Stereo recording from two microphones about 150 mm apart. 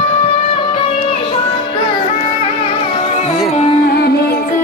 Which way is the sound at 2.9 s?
45° left (ahead or behind).